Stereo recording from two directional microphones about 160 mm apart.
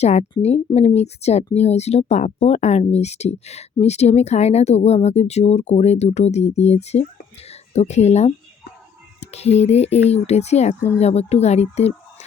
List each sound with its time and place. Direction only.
0.0 s speech: 45° left (ahead or behind)